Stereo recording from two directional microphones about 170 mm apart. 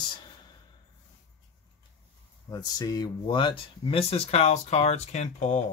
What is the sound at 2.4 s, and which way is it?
Speech, 20° left (ahead or behind).